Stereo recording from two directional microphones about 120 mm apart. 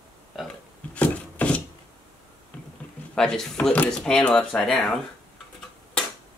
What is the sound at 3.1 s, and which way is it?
Speech, 5° left (ahead or behind).